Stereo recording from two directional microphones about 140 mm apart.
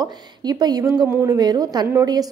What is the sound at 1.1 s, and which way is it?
Speech, 15° right (ahead or behind).